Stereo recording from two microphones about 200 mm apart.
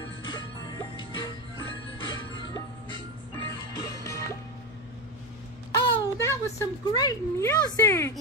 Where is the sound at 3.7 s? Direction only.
15° left (ahead or behind).